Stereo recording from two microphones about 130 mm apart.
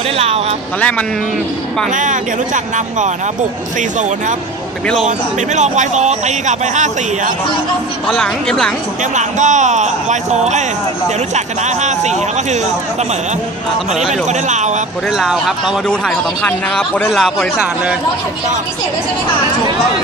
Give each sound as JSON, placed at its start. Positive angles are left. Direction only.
{"t": 0.7, "sound": "speech", "side_deg": 10}
{"t": 2.0, "sound": "speech", "side_deg": -75}
{"t": 5.0, "sound": "speech", "side_deg": -65}
{"t": 8.1, "sound": "speech", "side_deg": 5}
{"t": 9.1, "sound": "speech", "side_deg": -70}
{"t": 15.1, "sound": "speech", "side_deg": -5}
{"t": 16.4, "sound": "speech", "side_deg": 10}
{"t": 17.1, "sound": "speech", "side_deg": 0}